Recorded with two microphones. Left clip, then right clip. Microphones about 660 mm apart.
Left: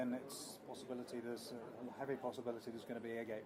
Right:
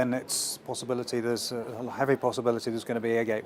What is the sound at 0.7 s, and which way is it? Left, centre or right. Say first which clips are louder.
Speech: right 17 dB; right.